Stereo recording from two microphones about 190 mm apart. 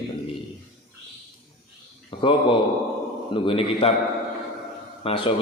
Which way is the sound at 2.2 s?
25° left (ahead or behind).